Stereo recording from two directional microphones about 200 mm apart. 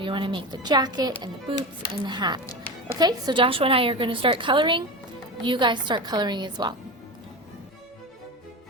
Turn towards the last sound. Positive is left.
turn(degrees=-20)  # may be behind; listen again after turning